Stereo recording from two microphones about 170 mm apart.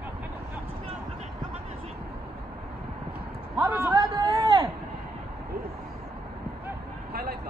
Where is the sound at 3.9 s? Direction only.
20° right (ahead or behind).